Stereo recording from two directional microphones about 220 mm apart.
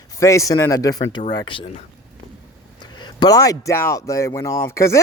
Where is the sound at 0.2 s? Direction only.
15° left (ahead or behind).